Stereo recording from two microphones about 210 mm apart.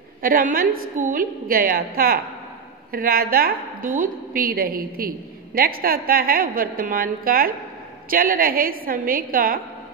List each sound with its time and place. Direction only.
0.2 s a woman's voice: 40° right (ahead or behind)